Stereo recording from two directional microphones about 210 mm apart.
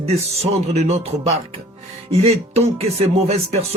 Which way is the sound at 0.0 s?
30° right (ahead or behind).